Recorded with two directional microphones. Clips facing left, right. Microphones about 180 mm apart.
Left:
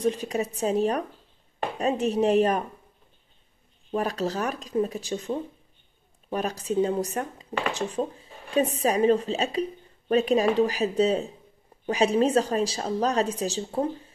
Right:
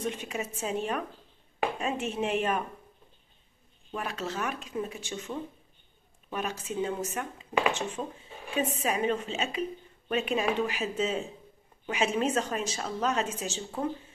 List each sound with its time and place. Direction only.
0.0 s a woman's voice: 35° left (ahead or behind)
3.9 s a woman's voice: 35° left (ahead or behind)